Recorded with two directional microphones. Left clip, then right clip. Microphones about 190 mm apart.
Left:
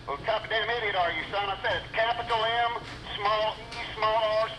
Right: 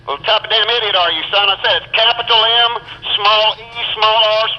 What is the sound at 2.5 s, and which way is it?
Radio, 35° right (ahead or behind).